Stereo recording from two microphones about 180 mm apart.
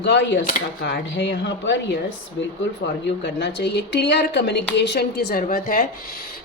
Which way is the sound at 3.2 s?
75° left (ahead or behind).